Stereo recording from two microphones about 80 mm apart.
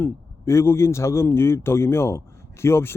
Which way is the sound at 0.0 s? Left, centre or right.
Left.